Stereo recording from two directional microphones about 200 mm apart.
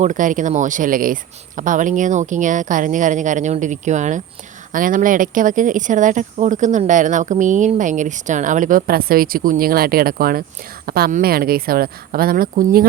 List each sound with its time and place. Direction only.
0.0 s speech: 40° right (ahead or behind)